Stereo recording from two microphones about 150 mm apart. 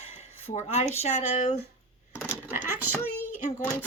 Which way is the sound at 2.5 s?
15° right (ahead or behind).